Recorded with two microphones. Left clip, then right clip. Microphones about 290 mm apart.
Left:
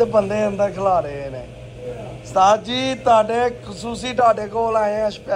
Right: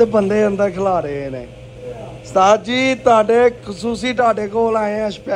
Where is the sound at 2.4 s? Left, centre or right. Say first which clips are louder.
Right 2 dB; centre.